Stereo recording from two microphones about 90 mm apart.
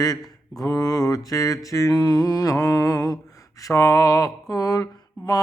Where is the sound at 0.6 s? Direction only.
45° left (ahead or behind).